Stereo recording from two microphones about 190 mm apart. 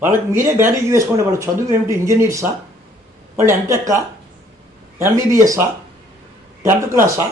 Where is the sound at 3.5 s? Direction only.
15° right (ahead or behind).